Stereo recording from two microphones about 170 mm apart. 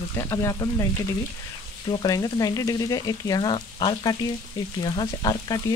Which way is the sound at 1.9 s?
20° left (ahead or behind).